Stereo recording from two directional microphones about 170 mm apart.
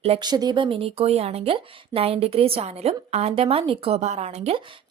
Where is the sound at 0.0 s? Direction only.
30° right (ahead or behind).